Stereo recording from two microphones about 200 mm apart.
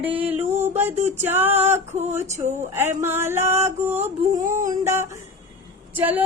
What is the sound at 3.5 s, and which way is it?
Speech, 30° right (ahead or behind).